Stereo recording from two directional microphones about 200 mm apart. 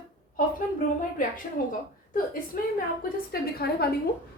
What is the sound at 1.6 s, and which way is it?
A woman's voice, 45° left (ahead or behind).